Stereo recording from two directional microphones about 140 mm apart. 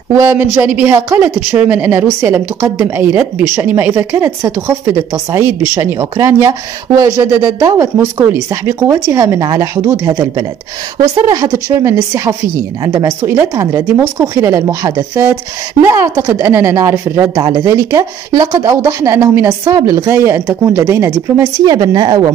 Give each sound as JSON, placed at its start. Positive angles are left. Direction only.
{"t": 0.1, "sound": "speech", "side_deg": -15}
{"t": 17.4, "sound": "speech", "side_deg": -35}